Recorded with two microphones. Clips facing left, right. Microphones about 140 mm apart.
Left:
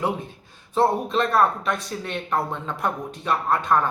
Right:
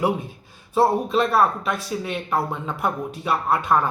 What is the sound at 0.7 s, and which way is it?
Speech, 5° right (ahead or behind).